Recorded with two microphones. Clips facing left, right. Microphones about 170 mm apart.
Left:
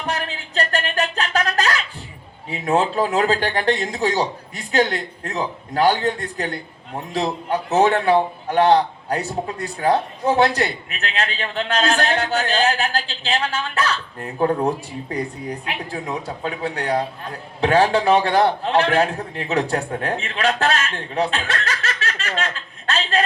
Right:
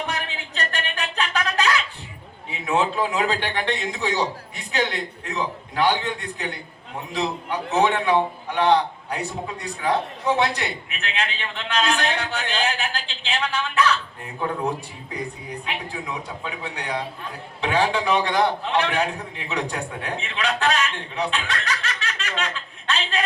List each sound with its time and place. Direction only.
0.0 s a sound: 40° left (ahead or behind)
2.5 s a man's voice: 40° left (ahead or behind)
15.6 s a man's voice: 35° left (ahead or behind)
21.7 s chuckle: 40° left (ahead or behind)